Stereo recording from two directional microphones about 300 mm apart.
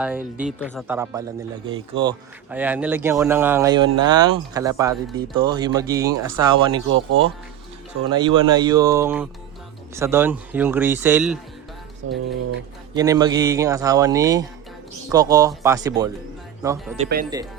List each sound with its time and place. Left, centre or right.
0.3 s speech: centre
2.5 s speech: centre
6.8 s speech: right
8.1 s speech: centre
12.9 s speech: centre
17.0 s speech: right